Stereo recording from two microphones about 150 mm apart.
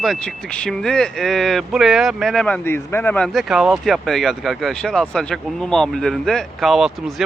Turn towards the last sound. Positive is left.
turn(degrees=0)  # may be behind; listen again after turning